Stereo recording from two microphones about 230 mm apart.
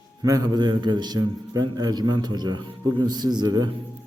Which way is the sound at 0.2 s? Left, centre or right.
Centre.